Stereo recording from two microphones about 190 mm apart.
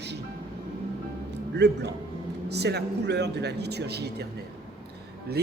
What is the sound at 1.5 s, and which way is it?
Speech, 60° right (ahead or behind).